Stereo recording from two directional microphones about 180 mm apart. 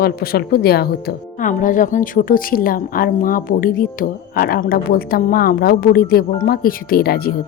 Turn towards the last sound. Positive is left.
turn(degrees=55)  # may be behind; listen again after turning